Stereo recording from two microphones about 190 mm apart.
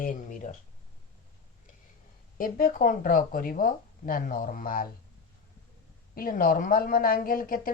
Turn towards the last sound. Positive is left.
turn(degrees=50)  # may be behind; listen again after turning